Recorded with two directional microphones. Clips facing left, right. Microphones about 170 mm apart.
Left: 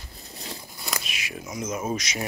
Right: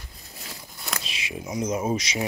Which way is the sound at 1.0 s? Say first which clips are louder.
Right 2 dB; 25° right (ahead or behind).